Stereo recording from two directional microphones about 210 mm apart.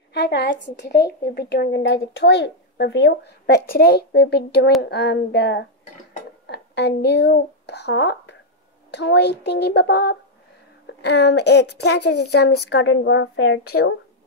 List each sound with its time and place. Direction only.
0.1 s a woman's voice: 55° left (ahead or behind)